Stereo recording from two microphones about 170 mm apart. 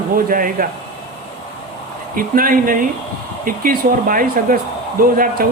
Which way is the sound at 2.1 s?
55° right (ahead or behind).